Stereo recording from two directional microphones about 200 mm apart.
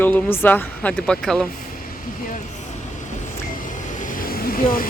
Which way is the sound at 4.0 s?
45° left (ahead or behind).